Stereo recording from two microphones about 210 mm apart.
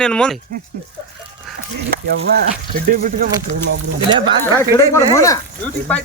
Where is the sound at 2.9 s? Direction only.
40° right (ahead or behind).